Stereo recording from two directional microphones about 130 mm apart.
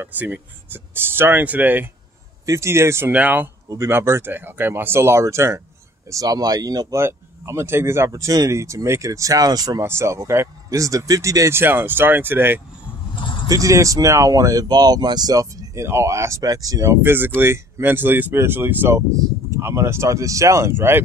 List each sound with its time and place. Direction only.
0.0 s speech: 15° right (ahead or behind)
13.1 s a sound: 40° left (ahead or behind)
13.5 s speech: 25° right (ahead or behind)